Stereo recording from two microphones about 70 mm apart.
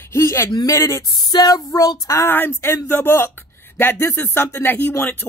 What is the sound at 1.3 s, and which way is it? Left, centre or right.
Child singing, left.